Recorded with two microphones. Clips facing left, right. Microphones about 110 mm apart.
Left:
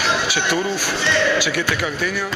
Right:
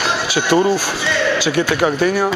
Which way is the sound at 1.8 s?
45° right (ahead or behind).